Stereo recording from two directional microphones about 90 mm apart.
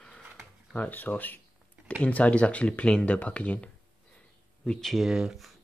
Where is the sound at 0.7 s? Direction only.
20° left (ahead or behind).